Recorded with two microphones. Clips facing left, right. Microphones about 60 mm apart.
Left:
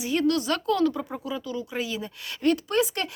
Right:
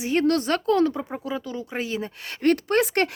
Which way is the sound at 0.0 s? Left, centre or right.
Right.